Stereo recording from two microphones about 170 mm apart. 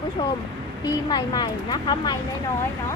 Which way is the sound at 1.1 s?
25° left (ahead or behind).